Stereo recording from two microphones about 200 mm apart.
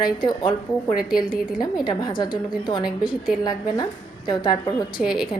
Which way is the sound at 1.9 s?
20° left (ahead or behind).